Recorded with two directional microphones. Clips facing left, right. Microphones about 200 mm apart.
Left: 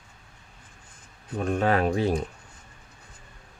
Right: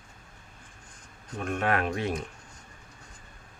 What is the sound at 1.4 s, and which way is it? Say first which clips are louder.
Speech: left 5 dB; 35° left (ahead or behind).